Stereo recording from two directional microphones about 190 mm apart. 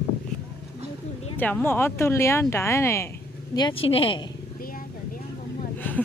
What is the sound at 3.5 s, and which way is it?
Speech, 25° left (ahead or behind).